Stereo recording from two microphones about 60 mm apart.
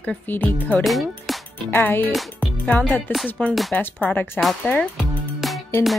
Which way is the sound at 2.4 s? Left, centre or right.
Left.